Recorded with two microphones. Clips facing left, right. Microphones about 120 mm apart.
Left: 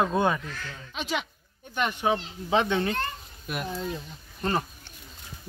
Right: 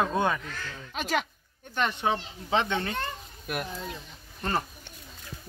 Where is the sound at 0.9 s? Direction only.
45° right (ahead or behind).